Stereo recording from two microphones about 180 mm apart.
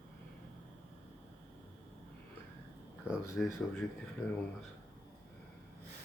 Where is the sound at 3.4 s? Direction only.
5° left (ahead or behind).